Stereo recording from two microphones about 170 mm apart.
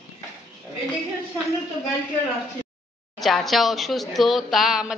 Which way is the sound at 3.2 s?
Centre (ahead or behind).